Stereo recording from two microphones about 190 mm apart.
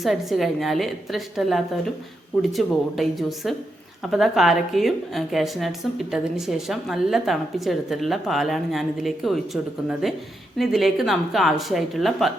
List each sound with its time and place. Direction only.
0.0 s a woman's voice: centre (ahead or behind)